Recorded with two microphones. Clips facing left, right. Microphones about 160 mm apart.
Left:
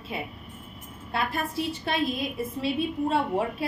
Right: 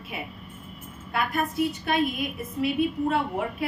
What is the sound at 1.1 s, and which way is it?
A woman's voice, 30° left (ahead or behind).